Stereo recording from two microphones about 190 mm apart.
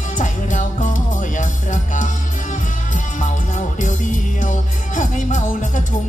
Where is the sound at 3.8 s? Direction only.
40° left (ahead or behind).